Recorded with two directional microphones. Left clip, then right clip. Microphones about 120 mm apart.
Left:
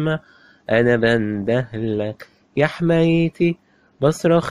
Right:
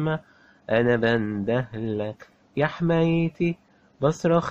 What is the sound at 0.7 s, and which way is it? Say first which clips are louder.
Speech: left 5 dB; 20° left (ahead or behind).